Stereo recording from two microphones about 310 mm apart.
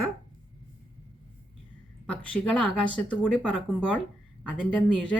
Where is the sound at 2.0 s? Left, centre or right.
Centre.